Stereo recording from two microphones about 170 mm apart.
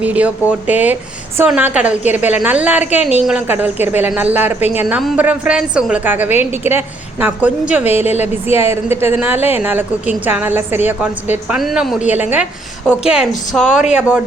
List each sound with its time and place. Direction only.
0.0 s a woman's voice: 10° right (ahead or behind)
8.0 s a woman's voice: 40° left (ahead or behind)
8.4 s a woman's voice: 15° right (ahead or behind)